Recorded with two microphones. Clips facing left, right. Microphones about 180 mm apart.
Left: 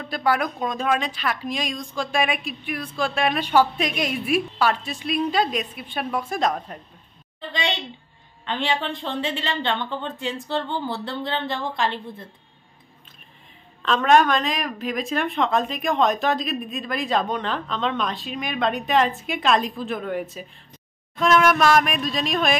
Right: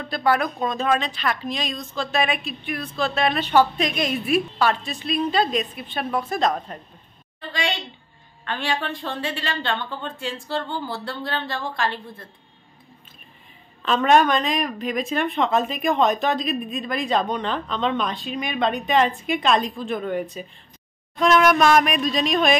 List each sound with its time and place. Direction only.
0.0 s a woman's voice: 10° left (ahead or behind)
8.5 s a woman's voice: 20° left (ahead or behind)
13.8 s a woman's voice: centre (ahead or behind)